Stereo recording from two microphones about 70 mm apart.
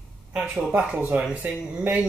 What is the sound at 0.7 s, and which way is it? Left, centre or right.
Speech, right.